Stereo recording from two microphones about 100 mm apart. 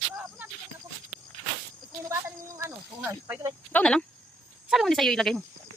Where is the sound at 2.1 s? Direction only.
30° right (ahead or behind).